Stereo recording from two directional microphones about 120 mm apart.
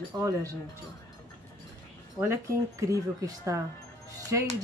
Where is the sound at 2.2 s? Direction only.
25° right (ahead or behind).